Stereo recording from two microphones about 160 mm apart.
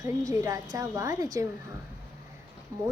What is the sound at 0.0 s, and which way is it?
A woman's voice, 20° right (ahead or behind).